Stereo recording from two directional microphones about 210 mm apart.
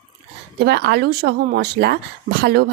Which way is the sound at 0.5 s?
50° right (ahead or behind).